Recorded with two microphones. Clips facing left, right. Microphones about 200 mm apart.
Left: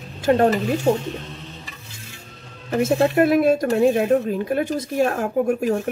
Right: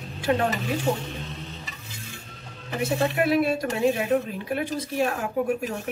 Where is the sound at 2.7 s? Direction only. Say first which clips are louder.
Left 7 dB; 45° left (ahead or behind).